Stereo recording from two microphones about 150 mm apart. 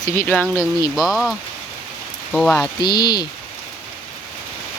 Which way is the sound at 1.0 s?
Centre (ahead or behind).